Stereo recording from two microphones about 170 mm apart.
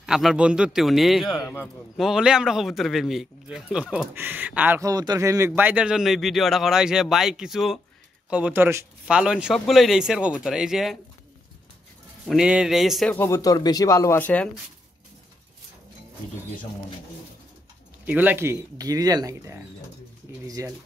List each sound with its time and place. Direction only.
0.0 s a man's voice: centre (ahead or behind)
12.3 s speech: 5° right (ahead or behind)
13.1 s speech: 15° left (ahead or behind)
18.0 s a man's voice: 10° right (ahead or behind)